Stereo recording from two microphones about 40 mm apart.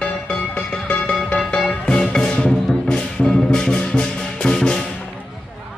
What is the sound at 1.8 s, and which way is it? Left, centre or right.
Music, centre.